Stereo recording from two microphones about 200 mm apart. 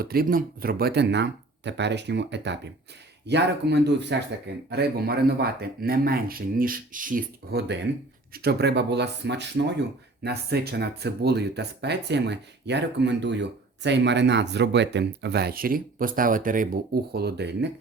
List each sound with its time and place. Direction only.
0.0 s speech: 50° right (ahead or behind)